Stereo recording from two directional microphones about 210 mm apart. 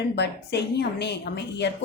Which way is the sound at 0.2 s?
55° left (ahead or behind).